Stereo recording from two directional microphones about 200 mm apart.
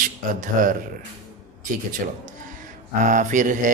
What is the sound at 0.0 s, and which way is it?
Speech, 40° right (ahead or behind).